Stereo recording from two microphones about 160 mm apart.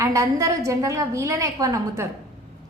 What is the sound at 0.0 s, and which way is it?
A woman's voice, 20° right (ahead or behind).